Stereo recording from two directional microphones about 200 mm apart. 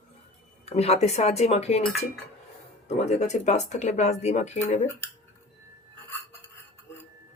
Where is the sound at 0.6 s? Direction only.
30° left (ahead or behind).